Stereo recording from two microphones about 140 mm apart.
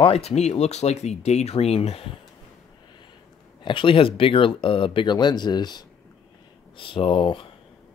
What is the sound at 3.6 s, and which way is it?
Speech, 40° left (ahead or behind).